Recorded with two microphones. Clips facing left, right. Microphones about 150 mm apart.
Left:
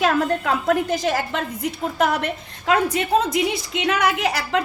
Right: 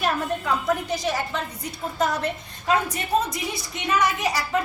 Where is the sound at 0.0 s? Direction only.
90° left.